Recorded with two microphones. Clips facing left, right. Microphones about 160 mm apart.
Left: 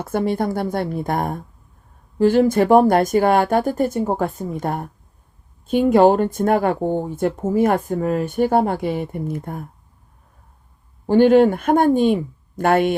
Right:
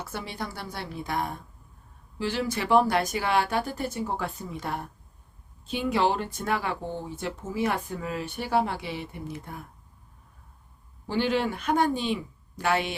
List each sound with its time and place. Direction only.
0.0 s speech: 50° left (ahead or behind)
11.0 s speech: 50° left (ahead or behind)